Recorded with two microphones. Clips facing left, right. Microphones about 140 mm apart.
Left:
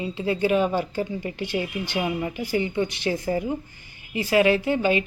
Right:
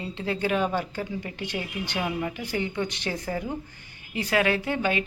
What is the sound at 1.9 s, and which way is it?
Speech, 10° left (ahead or behind).